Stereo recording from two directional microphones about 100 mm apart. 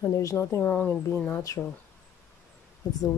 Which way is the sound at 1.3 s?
35° left (ahead or behind).